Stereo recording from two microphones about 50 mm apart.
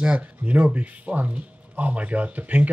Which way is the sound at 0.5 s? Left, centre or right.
Right.